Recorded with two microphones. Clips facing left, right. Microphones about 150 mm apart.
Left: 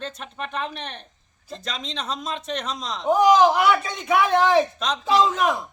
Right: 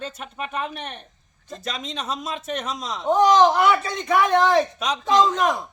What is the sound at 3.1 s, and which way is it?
A man's voice, 10° left (ahead or behind).